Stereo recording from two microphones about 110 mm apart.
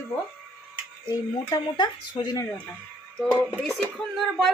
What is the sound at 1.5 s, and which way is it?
Speech, 40° left (ahead or behind).